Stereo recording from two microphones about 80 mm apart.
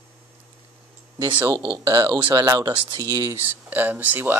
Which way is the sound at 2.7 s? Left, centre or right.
Right.